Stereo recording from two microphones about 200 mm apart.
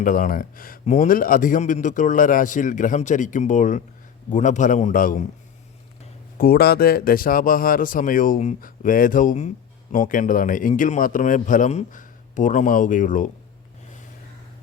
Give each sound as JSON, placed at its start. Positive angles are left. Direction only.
{"t": 0.0, "sound": "a man's voice", "side_deg": 45}
{"t": 6.3, "sound": "a man's voice", "side_deg": 50}